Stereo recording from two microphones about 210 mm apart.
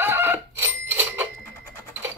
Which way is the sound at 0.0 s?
10° right (ahead or behind).